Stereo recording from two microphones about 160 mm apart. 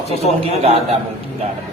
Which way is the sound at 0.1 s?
40° left (ahead or behind).